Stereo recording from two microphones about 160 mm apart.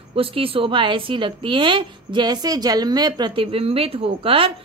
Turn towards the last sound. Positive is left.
turn(degrees=-35)  # may be behind; listen again after turning